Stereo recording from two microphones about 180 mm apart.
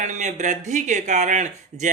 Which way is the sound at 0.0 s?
40° right (ahead or behind).